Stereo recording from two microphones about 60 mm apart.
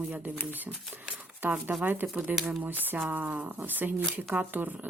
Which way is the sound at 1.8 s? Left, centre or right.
Right.